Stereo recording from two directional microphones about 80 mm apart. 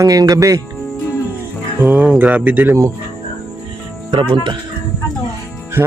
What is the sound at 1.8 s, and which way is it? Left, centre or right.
Speech, centre.